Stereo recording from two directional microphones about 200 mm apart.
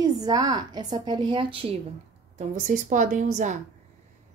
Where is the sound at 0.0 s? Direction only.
20° right (ahead or behind).